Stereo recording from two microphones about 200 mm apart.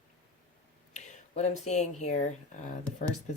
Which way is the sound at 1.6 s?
35° left (ahead or behind).